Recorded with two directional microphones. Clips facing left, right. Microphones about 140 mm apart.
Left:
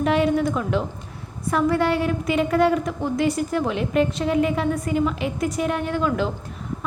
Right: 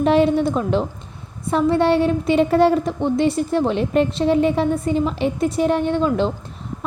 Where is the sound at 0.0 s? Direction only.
30° right (ahead or behind).